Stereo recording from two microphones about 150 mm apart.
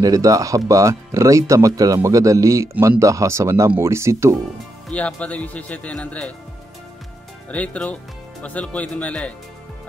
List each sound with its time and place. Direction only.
0.0 s speech: 25° right (ahead or behind)
4.8 s speech: 10° left (ahead or behind)
7.4 s speech: 10° left (ahead or behind)